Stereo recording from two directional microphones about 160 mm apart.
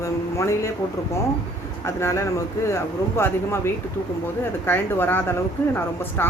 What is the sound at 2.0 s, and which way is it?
Speech, 15° left (ahead or behind).